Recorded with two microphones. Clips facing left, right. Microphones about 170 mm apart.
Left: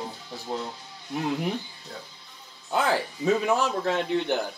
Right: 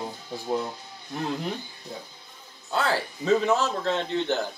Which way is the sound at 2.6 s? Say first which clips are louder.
Left 1 dB; 15° left (ahead or behind).